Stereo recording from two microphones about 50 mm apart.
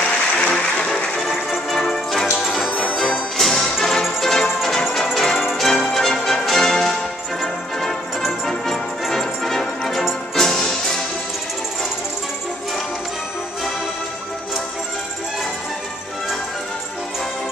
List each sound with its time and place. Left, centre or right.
0.4 s music: centre
2.4 s music: centre
2.7 s music: left
3.3 s music: centre
8.5 s music: centre